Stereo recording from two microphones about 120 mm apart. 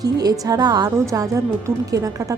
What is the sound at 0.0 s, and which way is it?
A woman's voice, 30° right (ahead or behind).